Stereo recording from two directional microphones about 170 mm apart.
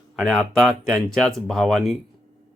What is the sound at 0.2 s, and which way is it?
Speech, centre (ahead or behind).